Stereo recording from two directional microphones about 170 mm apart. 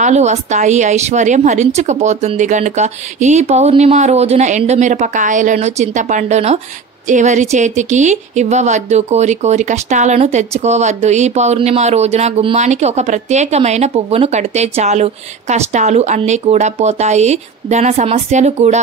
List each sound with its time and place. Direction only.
0.0 s a woman's voice: 40° right (ahead or behind)